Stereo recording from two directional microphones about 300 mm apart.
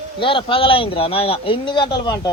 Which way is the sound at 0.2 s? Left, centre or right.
Centre.